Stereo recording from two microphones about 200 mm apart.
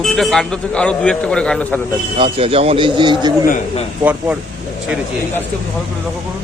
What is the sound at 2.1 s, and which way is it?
A man's voice, 30° right (ahead or behind).